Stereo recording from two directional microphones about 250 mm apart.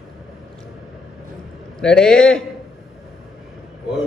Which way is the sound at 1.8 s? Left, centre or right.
Centre.